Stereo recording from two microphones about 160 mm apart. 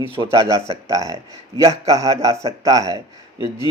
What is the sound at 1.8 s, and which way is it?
Speech, 20° right (ahead or behind).